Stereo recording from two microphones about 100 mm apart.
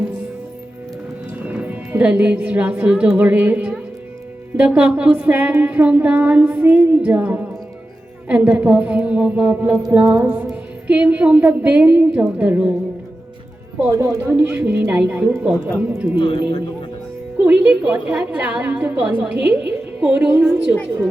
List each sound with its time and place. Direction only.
1.5 s a woman's voice: 15° right (ahead or behind)
9.9 s music: 25° right (ahead or behind)
10.5 s speech: 15° right (ahead or behind)
13.9 s speech: 30° right (ahead or behind)
14.2 s speech: 20° right (ahead or behind)
16.1 s speech: 55° left (ahead or behind)
17.4 s speech: 15° right (ahead or behind)